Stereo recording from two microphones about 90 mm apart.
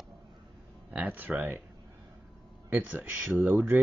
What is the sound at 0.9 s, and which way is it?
Speech, 20° right (ahead or behind).